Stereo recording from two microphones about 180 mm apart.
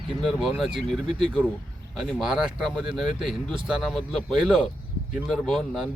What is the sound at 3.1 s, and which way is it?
Speech, 30° right (ahead or behind).